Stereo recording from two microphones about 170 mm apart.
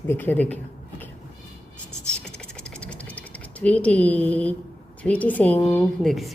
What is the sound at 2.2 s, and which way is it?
Typing, 5° left (ahead or behind).